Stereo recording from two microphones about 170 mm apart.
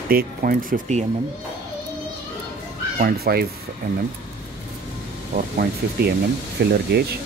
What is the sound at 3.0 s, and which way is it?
Speech, 65° right (ahead or behind).